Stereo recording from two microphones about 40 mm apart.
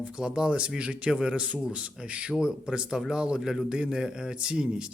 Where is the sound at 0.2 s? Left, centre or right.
Right.